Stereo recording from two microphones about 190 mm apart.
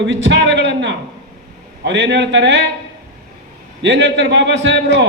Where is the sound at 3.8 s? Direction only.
65° right (ahead or behind).